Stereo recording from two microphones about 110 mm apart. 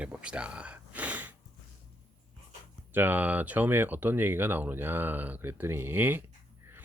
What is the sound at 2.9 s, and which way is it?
Speech, 15° right (ahead or behind).